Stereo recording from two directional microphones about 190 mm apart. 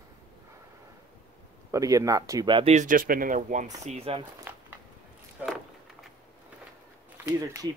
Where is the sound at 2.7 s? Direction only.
45° right (ahead or behind).